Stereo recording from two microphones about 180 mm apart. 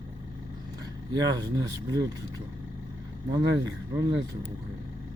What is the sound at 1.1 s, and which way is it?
Speech, 20° right (ahead or behind).